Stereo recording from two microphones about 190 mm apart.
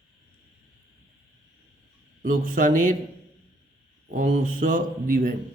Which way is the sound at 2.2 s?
45° right (ahead or behind).